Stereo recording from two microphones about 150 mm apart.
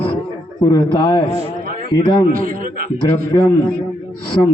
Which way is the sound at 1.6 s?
75° right (ahead or behind).